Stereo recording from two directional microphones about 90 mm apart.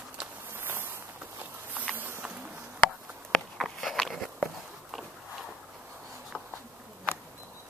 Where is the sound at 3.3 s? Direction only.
5° left (ahead or behind).